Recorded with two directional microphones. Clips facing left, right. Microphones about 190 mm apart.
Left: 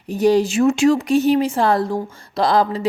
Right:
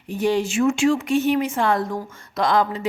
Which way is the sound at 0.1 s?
40° left (ahead or behind).